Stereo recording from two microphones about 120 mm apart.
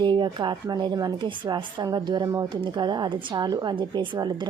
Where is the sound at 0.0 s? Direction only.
40° right (ahead or behind).